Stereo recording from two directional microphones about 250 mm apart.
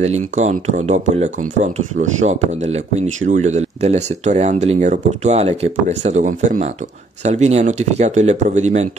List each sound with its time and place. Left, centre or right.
0.0 s speech: right